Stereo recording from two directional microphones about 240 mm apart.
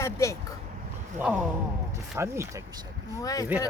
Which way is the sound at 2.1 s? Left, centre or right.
Centre.